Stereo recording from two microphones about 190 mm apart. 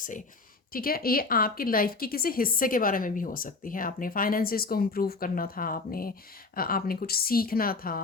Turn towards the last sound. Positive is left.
turn(degrees=50)  # may be behind; listen again after turning